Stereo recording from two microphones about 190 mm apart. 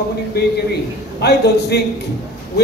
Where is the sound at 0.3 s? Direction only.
60° left (ahead or behind).